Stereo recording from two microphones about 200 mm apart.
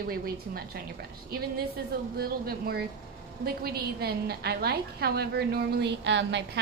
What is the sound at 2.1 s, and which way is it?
A woman's voice, 50° right (ahead or behind).